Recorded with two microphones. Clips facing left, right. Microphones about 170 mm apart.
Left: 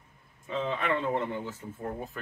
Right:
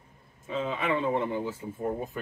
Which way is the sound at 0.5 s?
5° right (ahead or behind).